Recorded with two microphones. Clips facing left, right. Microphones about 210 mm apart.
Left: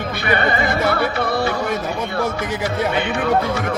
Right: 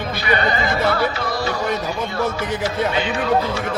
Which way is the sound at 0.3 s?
60° left (ahead or behind).